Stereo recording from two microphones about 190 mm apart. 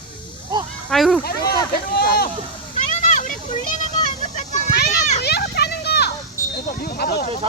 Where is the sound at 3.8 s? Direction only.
40° left (ahead or behind).